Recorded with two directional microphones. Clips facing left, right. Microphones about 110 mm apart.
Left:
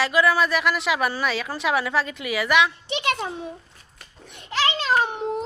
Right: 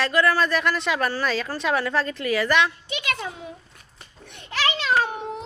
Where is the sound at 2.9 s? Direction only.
30° left (ahead or behind).